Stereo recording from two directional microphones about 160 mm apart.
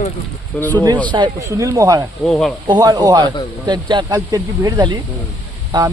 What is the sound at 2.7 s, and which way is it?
Speech, 25° right (ahead or behind).